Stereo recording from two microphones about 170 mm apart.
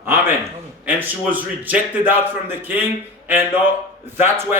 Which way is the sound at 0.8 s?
10° right (ahead or behind).